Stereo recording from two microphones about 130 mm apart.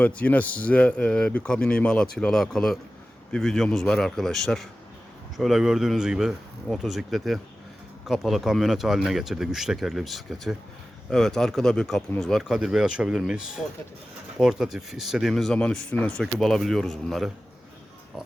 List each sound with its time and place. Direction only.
0.0 s speech: 10° left (ahead or behind)